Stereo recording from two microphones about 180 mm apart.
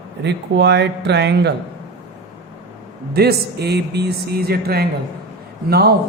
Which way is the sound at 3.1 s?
60° right (ahead or behind).